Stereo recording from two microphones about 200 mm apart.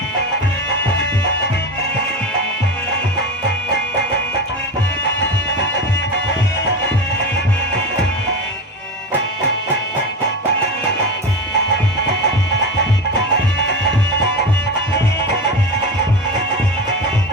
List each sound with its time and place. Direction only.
5.0 s music: 60° left (ahead or behind)
13.3 s music: 60° left (ahead or behind)